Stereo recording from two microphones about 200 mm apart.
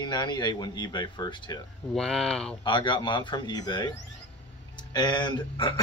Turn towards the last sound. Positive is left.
turn(degrees=20)  # may be behind; listen again after turning